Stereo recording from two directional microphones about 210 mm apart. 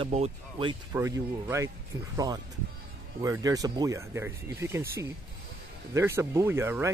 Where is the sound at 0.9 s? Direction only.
10° right (ahead or behind).